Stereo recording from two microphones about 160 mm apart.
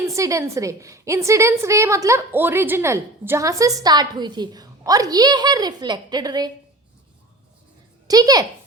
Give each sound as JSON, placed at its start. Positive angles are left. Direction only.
{"t": 0.0, "sound": "a woman's voice", "side_deg": -20}
{"t": 8.0, "sound": "a woman's voice", "side_deg": -25}